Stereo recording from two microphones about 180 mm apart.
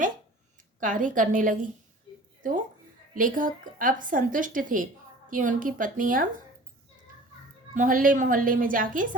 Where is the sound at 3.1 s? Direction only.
50° right (ahead or behind).